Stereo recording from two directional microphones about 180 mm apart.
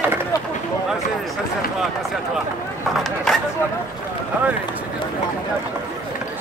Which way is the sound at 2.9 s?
Centre (ahead or behind).